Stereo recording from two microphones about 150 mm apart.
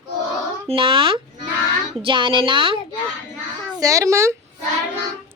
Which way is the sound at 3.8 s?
20° right (ahead or behind).